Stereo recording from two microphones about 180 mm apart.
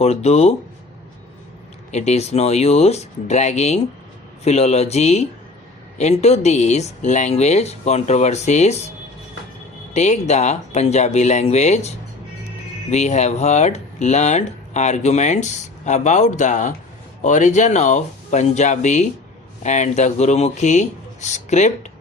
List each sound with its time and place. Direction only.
0.0 s speech: 35° left (ahead or behind)
1.9 s speech: 40° left (ahead or behind)
9.9 s speech: 40° left (ahead or behind)